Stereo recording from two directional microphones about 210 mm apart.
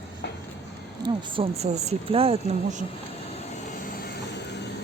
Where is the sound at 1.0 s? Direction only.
25° right (ahead or behind).